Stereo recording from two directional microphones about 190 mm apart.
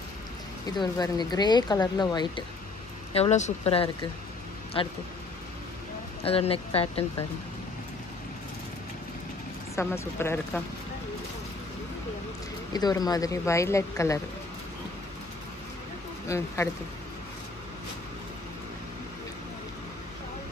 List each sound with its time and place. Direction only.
0.7 s speech: 20° left (ahead or behind)
3.1 s speech: 35° left (ahead or behind)
6.2 s speech: 30° left (ahead or behind)
9.8 s speech: 15° left (ahead or behind)
12.7 s speech: 20° left (ahead or behind)
16.3 s speech: 15° left (ahead or behind)